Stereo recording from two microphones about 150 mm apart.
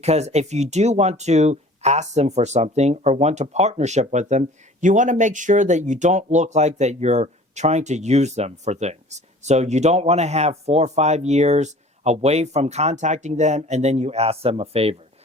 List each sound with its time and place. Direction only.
0.0 s speech: 45° right (ahead or behind)